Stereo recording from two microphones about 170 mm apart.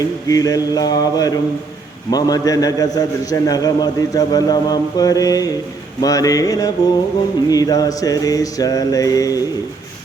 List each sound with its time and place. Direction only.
0.3 s a man's voice: 20° left (ahead or behind)